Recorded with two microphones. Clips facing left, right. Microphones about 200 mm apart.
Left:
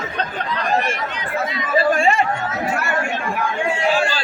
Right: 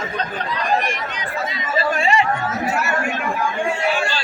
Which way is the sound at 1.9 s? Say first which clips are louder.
Left 1 dB; 50° left (ahead or behind).